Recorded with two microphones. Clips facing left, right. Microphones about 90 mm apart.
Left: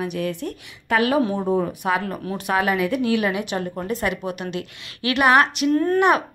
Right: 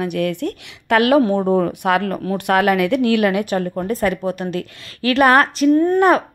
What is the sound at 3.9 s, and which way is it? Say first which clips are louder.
A woman's voice: right 5 dB; 40° right (ahead or behind).